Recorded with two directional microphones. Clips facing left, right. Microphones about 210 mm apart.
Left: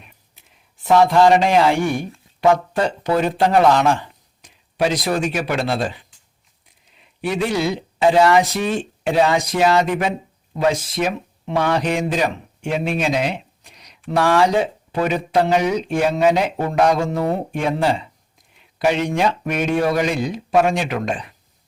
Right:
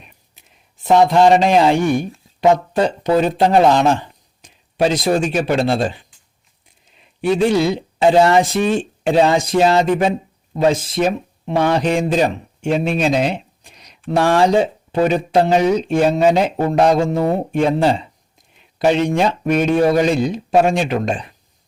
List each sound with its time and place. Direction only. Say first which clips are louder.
0.9 s speech: right 2 dB; 20° right (ahead or behind)
7.2 s speech: right 6 dB; 30° right (ahead or behind)